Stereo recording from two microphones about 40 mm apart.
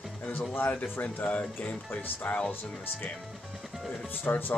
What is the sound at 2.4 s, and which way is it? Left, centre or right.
Speech, left.